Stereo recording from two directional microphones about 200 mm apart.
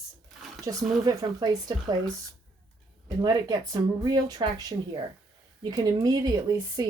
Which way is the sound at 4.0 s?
20° right (ahead or behind).